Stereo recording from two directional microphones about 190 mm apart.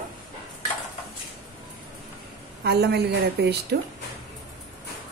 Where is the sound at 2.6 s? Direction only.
60° right (ahead or behind).